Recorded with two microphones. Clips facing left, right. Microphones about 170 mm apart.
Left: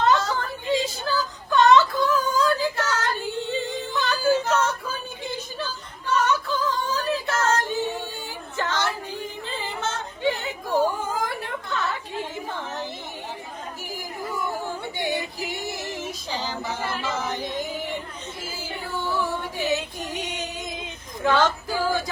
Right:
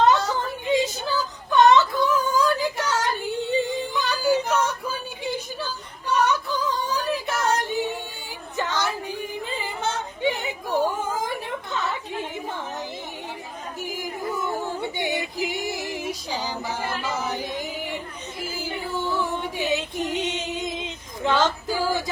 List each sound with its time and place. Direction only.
0.0 s whimper: 20° right (ahead or behind)
6.1 s female singing: 15° right (ahead or behind)
14.9 s music: 20° right (ahead or behind)
19.0 s female singing: 15° right (ahead or behind)